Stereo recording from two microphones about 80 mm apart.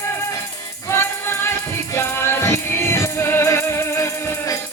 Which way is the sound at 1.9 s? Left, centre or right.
Left.